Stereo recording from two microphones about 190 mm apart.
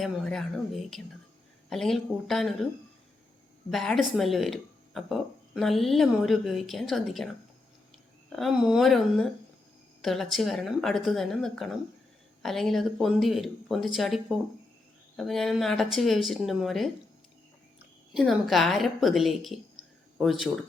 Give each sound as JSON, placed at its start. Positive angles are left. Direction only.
{"t": 0.0, "sound": "speech", "side_deg": 0}
{"t": 3.7, "sound": "speech", "side_deg": 0}
{"t": 8.4, "sound": "a woman's voice", "side_deg": 0}